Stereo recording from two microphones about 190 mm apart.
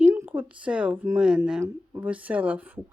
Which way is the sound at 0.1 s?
10° right (ahead or behind).